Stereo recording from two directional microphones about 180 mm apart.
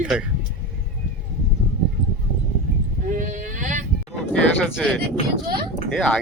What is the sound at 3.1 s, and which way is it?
Sheep, 45° right (ahead or behind).